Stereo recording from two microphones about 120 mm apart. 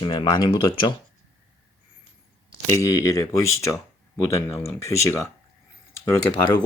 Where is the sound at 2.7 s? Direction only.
25° left (ahead or behind).